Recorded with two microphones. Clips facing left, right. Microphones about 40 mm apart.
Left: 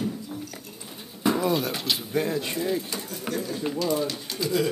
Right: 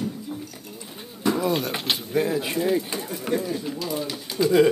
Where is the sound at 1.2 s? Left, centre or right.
Centre.